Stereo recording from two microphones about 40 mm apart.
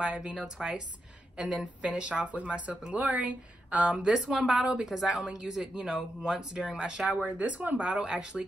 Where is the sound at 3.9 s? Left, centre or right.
Centre.